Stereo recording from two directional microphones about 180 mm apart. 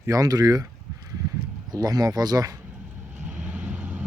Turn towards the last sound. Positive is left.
turn(degrees=-10)  # may be behind; listen again after turning